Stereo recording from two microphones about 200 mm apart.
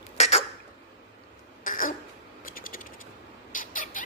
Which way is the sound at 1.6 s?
40° left (ahead or behind).